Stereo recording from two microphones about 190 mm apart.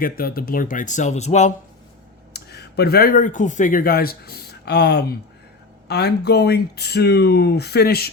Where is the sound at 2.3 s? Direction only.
60° left (ahead or behind).